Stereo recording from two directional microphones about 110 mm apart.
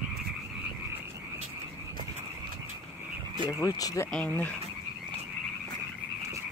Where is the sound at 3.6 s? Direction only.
30° left (ahead or behind).